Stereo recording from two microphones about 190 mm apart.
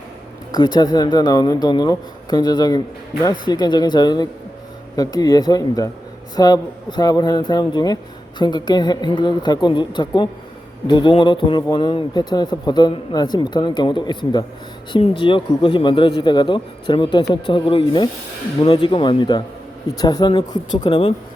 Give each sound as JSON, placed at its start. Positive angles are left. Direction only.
{"t": 0.5, "sound": "a man's voice", "side_deg": 20}